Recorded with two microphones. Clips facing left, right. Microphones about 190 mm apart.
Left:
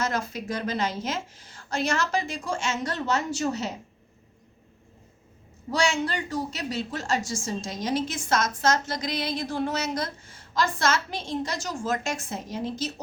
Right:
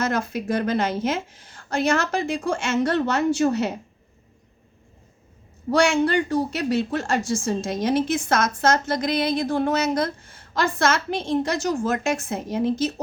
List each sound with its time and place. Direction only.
0.0 s speech: 55° right (ahead or behind)
5.7 s speech: 55° right (ahead or behind)